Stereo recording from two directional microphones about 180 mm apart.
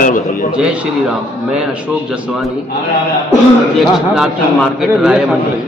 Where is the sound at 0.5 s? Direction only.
5° right (ahead or behind).